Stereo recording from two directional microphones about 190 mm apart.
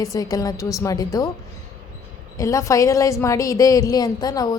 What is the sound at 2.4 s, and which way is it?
A man's voice, 15° left (ahead or behind).